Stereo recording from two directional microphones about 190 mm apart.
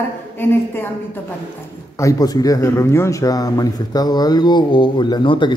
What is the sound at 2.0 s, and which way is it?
Speech, 20° left (ahead or behind).